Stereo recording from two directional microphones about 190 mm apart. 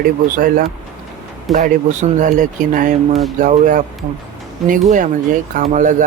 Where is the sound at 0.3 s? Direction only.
45° right (ahead or behind).